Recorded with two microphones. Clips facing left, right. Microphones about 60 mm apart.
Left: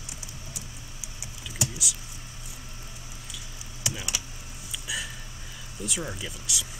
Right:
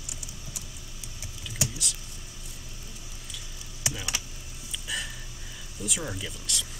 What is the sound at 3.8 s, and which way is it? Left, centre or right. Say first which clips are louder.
Computer keyboard: even; right.